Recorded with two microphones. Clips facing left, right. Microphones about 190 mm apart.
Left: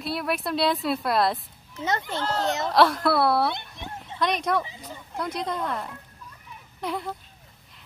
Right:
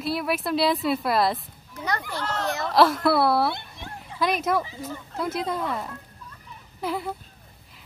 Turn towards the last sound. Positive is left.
turn(degrees=-5)  # may be behind; listen again after turning